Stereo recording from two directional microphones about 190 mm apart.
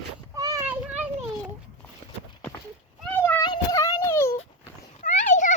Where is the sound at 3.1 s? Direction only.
10° left (ahead or behind).